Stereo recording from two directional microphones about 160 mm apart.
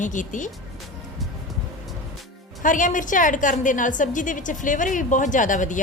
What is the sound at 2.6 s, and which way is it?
A woman's voice, 55° left (ahead or behind).